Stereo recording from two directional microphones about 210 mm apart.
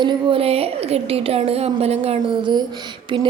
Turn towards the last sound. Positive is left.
turn(degrees=-20)  # may be behind; listen again after turning